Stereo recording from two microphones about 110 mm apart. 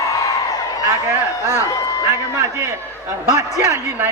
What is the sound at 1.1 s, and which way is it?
Speech, 25° right (ahead or behind).